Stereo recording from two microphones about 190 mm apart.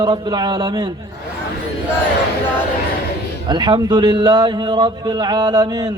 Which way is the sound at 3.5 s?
25° right (ahead or behind).